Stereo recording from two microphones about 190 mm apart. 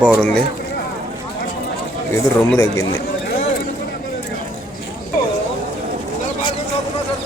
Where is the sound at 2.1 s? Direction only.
15° left (ahead or behind).